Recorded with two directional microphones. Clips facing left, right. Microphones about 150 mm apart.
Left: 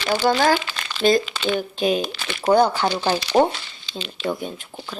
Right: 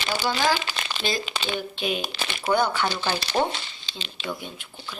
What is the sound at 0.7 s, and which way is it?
Crumpling, 20° right (ahead or behind).